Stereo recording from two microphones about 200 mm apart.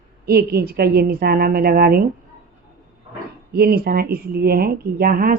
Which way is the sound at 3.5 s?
50° right (ahead or behind).